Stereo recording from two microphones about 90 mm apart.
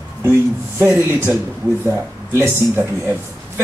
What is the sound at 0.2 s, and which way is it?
Speech, 25° right (ahead or behind).